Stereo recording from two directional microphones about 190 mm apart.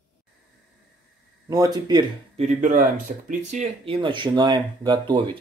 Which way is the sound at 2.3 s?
40° right (ahead or behind).